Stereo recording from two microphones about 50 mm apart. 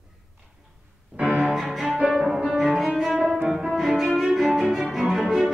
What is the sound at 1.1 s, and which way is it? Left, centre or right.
Music, right.